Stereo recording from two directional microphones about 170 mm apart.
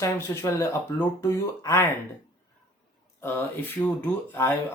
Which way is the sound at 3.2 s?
10° left (ahead or behind).